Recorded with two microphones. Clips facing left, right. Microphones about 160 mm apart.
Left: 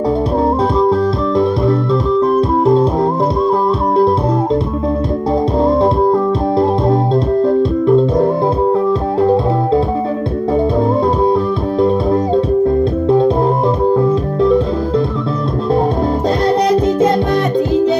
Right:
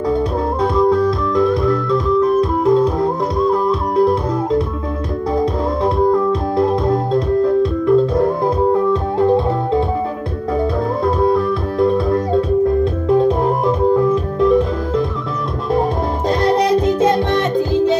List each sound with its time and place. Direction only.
0.7 s organ: 30° left (ahead or behind)
2.6 s music: 30° left (ahead or behind)
7.8 s music: 30° left (ahead or behind)
11.1 s music: 30° left (ahead or behind)